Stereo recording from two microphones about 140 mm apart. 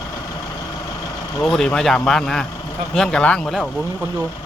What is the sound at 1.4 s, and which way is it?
Speech, 5° left (ahead or behind).